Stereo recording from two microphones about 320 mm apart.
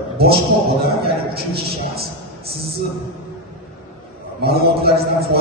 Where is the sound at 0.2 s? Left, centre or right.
Right.